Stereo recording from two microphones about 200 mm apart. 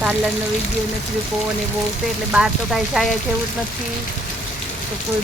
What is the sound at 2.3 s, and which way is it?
Speech, centre (ahead or behind).